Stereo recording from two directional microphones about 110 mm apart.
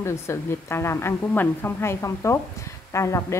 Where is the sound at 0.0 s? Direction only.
25° left (ahead or behind).